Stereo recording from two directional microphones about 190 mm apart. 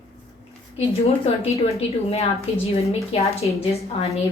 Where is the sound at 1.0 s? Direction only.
30° left (ahead or behind).